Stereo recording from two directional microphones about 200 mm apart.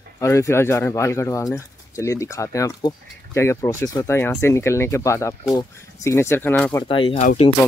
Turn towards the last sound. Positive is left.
turn(degrees=40)  # may be behind; listen again after turning